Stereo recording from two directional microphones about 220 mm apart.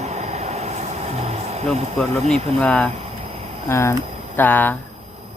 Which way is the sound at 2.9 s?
30° right (ahead or behind).